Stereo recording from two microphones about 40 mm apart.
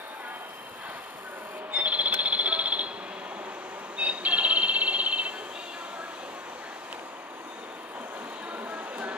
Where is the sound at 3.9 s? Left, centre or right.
Right.